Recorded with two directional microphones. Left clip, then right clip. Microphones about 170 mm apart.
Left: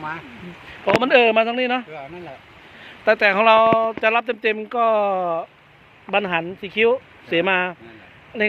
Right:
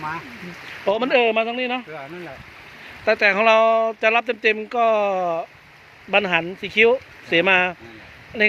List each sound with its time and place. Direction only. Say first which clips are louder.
1.1 s speech: left 4 dB; 25° left (ahead or behind)
3.0 s speech: left 1 dB; 5° left (ahead or behind)